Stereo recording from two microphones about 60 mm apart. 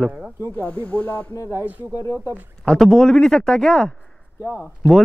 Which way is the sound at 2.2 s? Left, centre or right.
Right.